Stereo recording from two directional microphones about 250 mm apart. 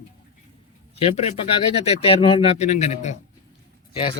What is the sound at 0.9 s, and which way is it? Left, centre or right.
Speech, left.